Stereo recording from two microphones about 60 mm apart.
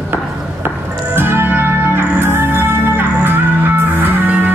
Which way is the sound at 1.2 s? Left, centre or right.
Right.